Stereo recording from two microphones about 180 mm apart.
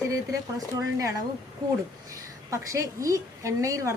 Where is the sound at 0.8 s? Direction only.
15° right (ahead or behind).